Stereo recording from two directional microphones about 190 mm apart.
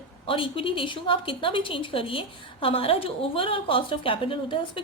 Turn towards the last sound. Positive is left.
turn(degrees=30)  # may be behind; listen again after turning